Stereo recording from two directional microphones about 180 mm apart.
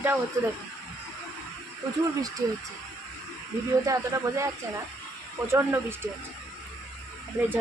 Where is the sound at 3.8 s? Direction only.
15° right (ahead or behind).